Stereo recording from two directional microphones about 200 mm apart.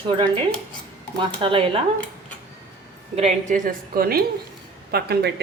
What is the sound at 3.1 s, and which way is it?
Speech, 35° right (ahead or behind).